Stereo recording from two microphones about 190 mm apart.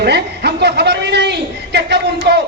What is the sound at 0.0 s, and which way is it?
Speech, 60° right (ahead or behind).